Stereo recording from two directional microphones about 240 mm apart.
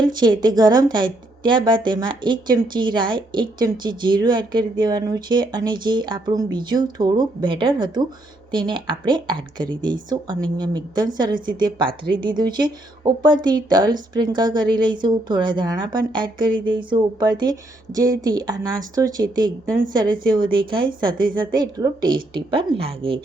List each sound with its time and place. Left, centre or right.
0.0 s a woman's voice: centre